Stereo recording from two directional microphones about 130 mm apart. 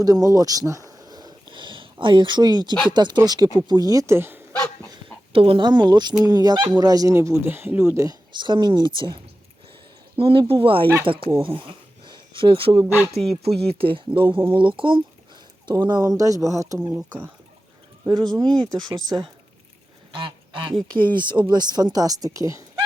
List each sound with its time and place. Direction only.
0.0 s a sound: 30° right (ahead or behind)
2.9 s speech: 35° right (ahead or behind); by 4.4 s 15° right (ahead or behind)
5.3 s speech: 45° right (ahead or behind); by 8.1 s 20° right (ahead or behind)
8.4 s speech: 35° right (ahead or behind)
11.4 s a sound: 40° right (ahead or behind)
13.1 s speech: centre (ahead or behind)
13.4 s speech: 50° right (ahead or behind); by 16.7 s 25° right (ahead or behind)
16.9 s speech: 10° right (ahead or behind)
18.1 s speech: 30° right (ahead or behind)
18.4 s speech: 5° left (ahead or behind)
18.7 s speech: 30° right (ahead or behind)
20.1 s speech: 40° right (ahead or behind); by 22.8 s 25° right (ahead or behind)